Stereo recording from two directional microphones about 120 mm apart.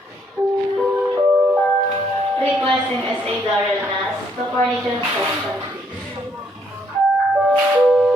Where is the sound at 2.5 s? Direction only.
10° right (ahead or behind).